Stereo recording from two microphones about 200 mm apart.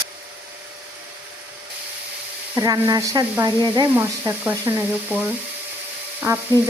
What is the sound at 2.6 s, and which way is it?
Sizzle, 20° right (ahead or behind).